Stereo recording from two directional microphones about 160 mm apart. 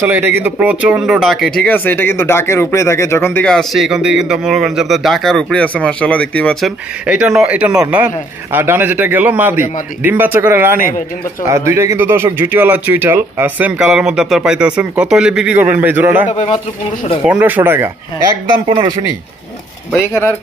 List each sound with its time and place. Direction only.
0.0 s speech: 10° right (ahead or behind); by 6.7 s 5° left (ahead or behind)
7.1 s speech: 5° right (ahead or behind)
16.3 s a man's voice: 45° left (ahead or behind)
17.2 s speech: 10° right (ahead or behind)
19.9 s speech: 15° left (ahead or behind)